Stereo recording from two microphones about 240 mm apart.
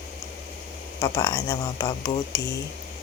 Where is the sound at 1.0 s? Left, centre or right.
Centre.